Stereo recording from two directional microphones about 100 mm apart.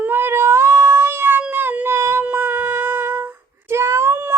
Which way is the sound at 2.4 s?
20° right (ahead or behind).